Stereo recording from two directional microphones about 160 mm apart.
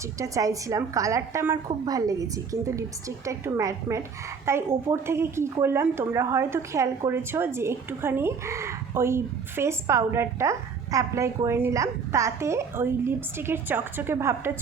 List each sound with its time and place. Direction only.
0.2 s a woman's voice: 20° right (ahead or behind)